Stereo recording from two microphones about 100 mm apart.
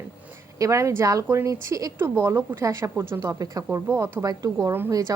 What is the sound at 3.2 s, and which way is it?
A woman's voice, 35° right (ahead or behind).